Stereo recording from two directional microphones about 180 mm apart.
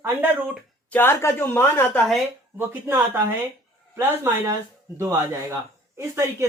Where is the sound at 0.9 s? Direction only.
10° left (ahead or behind).